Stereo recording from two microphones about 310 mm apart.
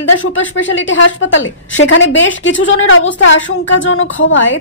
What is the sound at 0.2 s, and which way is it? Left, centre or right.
A woman's voice, left.